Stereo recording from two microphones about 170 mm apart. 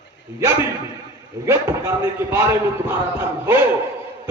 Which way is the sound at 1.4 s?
15° right (ahead or behind).